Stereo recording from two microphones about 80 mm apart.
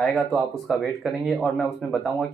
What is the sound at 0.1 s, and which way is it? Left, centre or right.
Speech, centre.